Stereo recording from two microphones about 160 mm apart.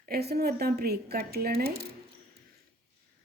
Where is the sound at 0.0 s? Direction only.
80° right.